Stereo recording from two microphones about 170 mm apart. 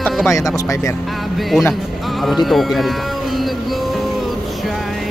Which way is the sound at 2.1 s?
Centre (ahead or behind).